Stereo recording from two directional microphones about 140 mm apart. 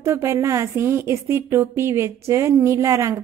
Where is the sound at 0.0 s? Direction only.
20° right (ahead or behind).